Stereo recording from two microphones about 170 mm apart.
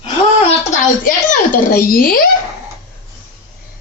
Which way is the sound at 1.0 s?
55° left (ahead or behind).